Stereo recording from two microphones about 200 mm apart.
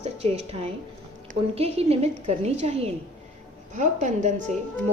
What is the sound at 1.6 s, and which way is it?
A woman's voice, 30° right (ahead or behind).